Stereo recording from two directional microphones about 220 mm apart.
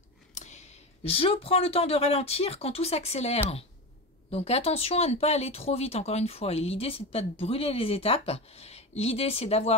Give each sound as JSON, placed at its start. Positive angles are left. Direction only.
{"t": 0.3, "sound": "speech", "side_deg": 30}